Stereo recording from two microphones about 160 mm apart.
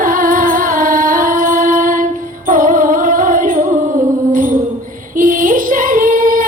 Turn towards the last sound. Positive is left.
turn(degrees=-55)  # may be behind; listen again after turning